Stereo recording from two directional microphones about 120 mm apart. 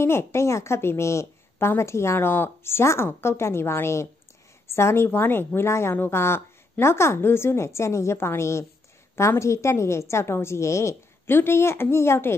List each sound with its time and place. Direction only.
0.0 s a woman's voice: 20° left (ahead or behind)